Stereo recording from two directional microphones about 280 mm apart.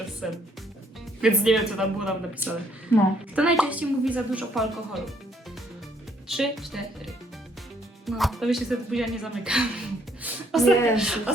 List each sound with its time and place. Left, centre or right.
0.2 s a woman's voice: centre
2.9 s a woman's voice: centre
3.3 s a woman's voice: centre
6.2 s a woman's voice: centre